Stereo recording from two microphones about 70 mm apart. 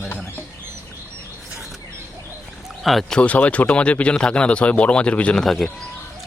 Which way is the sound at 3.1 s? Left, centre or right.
Centre.